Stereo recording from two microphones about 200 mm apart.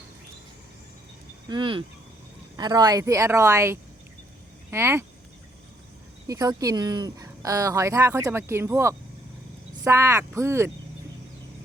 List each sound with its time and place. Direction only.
1.5 s speech: 25° right (ahead or behind)
6.2 s speech: 20° right (ahead or behind)